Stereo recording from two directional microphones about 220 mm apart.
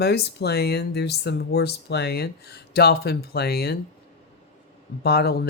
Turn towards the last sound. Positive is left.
turn(degrees=45)  # may be behind; listen again after turning